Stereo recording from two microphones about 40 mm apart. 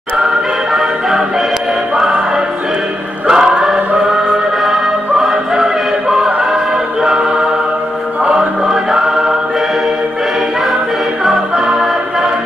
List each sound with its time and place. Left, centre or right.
3.3 s music: centre
5.3 s choir: centre
8.2 s music: right
8.6 s music: centre
11.2 s music: centre